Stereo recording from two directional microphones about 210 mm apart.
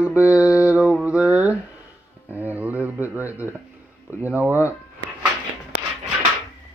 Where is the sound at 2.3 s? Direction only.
10° right (ahead or behind).